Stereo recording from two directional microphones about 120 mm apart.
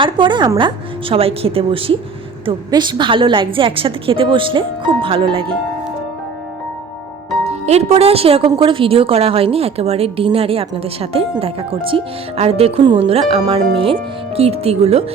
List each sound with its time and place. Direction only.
0.0 s a woman's voice: 40° right (ahead or behind)
1.1 s speech: 55° right (ahead or behind)
2.6 s speech: 40° right (ahead or behind)
7.4 s speech: 60° right (ahead or behind)
12.8 s a woman's voice: 40° right (ahead or behind)
13.1 s speech: 55° right (ahead or behind)